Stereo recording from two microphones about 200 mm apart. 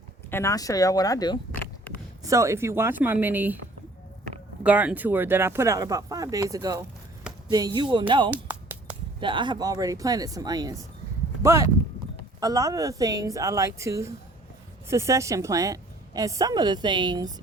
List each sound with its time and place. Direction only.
0.3 s speech: 15° left (ahead or behind)
2.2 s a woman's voice: 15° right (ahead or behind)
4.6 s a woman's voice: 5° right (ahead or behind)